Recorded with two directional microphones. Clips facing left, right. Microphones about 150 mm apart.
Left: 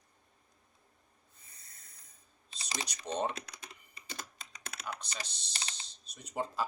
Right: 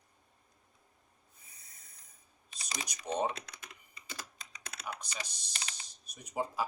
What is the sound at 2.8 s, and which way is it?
Speech, 10° right (ahead or behind).